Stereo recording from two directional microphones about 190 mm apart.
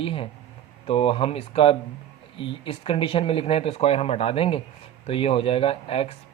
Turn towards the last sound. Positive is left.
turn(degrees=30)  # may be behind; listen again after turning